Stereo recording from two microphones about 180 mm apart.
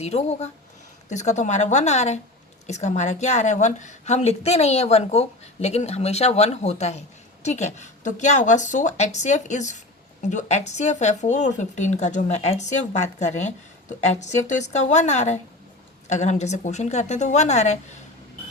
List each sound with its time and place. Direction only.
0.0 s a woman's voice: 40° left (ahead or behind)